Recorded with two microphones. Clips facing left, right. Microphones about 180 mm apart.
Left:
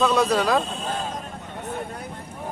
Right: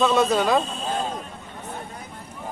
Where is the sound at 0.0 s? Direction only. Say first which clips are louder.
Right 1 dB; centre (ahead or behind).